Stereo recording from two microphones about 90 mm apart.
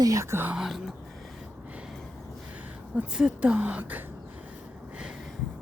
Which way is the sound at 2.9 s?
10° right (ahead or behind).